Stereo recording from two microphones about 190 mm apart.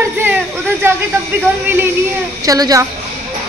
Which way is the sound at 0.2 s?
10° right (ahead or behind).